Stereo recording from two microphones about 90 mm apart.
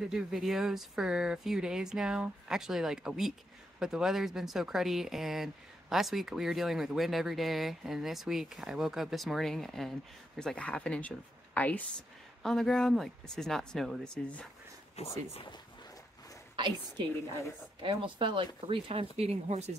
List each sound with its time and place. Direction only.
0.1 s speech: 5° right (ahead or behind); by 11.8 s 20° left (ahead or behind)
12.4 s speech: 5° left (ahead or behind)
15.0 s speech: 90° left
16.5 s a woman's voice: 60° right (ahead or behind)
18.7 s speech: 90° right